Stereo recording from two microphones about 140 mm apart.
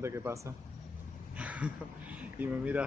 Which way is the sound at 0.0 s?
20° right (ahead or behind).